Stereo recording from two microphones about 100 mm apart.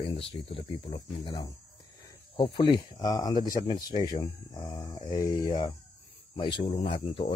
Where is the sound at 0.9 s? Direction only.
55° left (ahead or behind).